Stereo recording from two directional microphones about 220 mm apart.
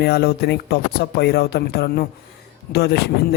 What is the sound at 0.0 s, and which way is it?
Speech, 45° left (ahead or behind).